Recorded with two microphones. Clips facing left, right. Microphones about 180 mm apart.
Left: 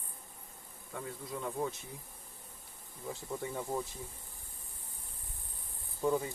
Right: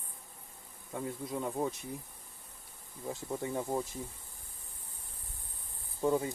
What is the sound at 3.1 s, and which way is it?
Speech, 20° right (ahead or behind).